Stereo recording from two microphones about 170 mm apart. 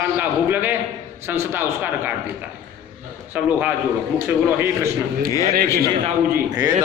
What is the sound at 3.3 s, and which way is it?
Speech, 10° right (ahead or behind).